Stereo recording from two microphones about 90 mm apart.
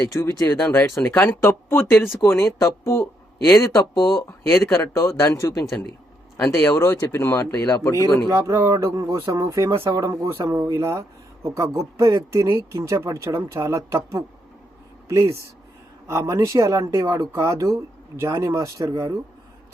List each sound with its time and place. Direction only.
0.1 s speech: 35° left (ahead or behind)
2.6 s speech: 35° left (ahead or behind)
6.3 s speech: 25° left (ahead or behind)
8.3 s speech: 35° right (ahead or behind)